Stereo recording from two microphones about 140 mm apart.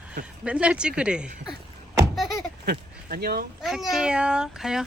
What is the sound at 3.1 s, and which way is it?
Speech, 90° right.